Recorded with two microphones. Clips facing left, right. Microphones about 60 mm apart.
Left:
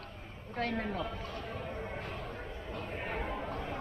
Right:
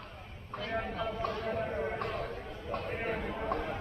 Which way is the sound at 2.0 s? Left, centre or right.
Right.